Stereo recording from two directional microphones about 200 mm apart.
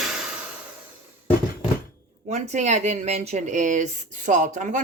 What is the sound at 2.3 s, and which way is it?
Speech, 35° right (ahead or behind).